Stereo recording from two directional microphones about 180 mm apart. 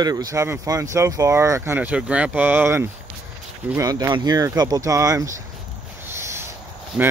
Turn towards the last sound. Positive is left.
turn(degrees=-10)  # may be behind; listen again after turning